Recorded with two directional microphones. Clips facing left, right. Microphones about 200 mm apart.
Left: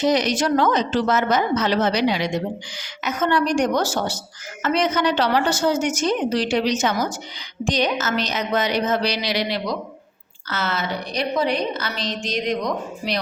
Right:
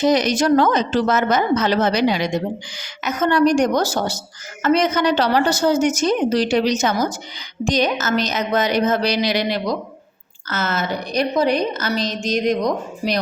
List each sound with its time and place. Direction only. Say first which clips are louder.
0.0 s a woman's voice: right 3 dB; 45° right (ahead or behind)